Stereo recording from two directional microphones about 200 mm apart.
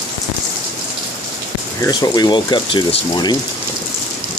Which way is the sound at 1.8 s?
20° left (ahead or behind).